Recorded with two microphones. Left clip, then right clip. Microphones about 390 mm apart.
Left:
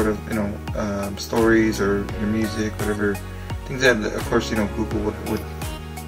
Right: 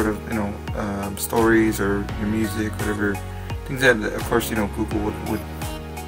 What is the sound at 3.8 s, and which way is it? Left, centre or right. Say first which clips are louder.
Speech: even; right.